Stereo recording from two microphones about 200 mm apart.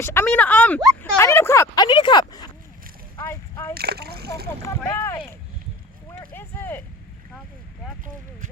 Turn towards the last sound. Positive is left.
turn(degrees=10)  # may be behind; listen again after turning